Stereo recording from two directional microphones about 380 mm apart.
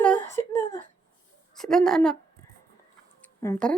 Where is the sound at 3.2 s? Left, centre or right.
Centre.